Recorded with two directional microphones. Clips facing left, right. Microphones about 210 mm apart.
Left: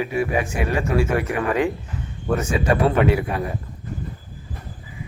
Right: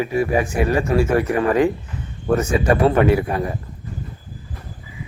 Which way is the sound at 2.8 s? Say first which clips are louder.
Right 4 dB; 30° right (ahead or behind).